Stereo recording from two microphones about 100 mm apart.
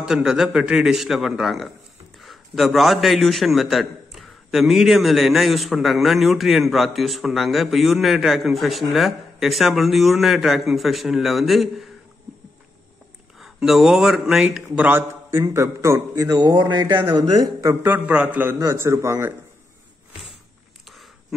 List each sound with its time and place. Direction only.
0.0 s a man's voice: 5° right (ahead or behind)
13.4 s speech: centre (ahead or behind)
14.9 s a man's voice: 25° right (ahead or behind); by 17.0 s 45° right (ahead or behind)
17.0 s a man's voice: 65° right (ahead or behind)
17.8 s a man's voice: 15° right (ahead or behind)